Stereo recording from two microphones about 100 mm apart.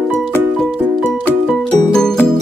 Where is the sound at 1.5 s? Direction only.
5° left (ahead or behind).